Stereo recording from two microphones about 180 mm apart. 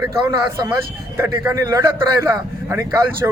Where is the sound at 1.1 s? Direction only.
10° right (ahead or behind).